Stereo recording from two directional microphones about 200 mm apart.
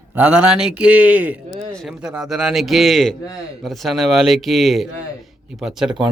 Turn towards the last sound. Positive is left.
turn(degrees=0)  # may be behind; listen again after turning